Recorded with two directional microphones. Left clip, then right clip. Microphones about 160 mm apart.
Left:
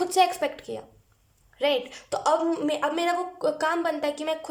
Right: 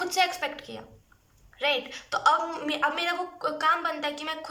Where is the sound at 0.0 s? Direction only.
45° left (ahead or behind).